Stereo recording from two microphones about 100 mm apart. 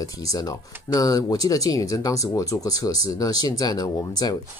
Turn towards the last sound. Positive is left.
turn(degrees=40)  # may be behind; listen again after turning